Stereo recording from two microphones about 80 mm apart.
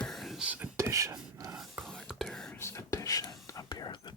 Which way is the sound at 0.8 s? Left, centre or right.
Right.